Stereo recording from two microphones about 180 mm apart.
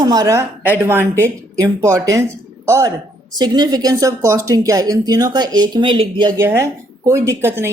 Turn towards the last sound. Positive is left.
turn(degrees=-15)  # may be behind; listen again after turning